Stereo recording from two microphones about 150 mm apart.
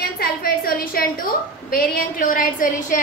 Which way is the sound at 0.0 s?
85° left.